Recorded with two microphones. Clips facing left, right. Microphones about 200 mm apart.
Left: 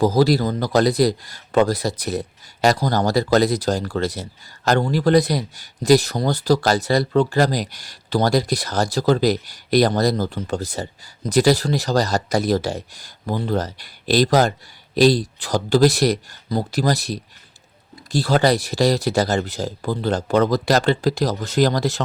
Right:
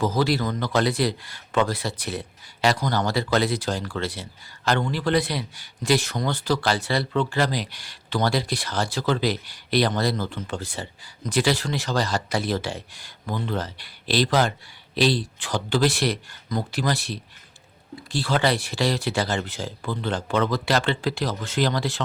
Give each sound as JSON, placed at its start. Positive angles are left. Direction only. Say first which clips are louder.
{"t": 0.0, "sound": "a man's voice", "louder": "left 6 dB", "side_deg": 35}